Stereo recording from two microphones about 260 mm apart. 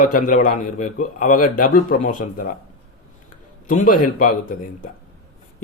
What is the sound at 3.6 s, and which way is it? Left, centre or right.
A man's voice, left.